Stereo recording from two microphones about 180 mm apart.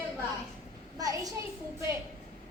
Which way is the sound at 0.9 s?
20° right (ahead or behind).